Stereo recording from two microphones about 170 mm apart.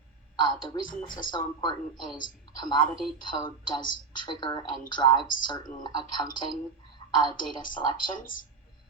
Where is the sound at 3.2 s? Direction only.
25° left (ahead or behind).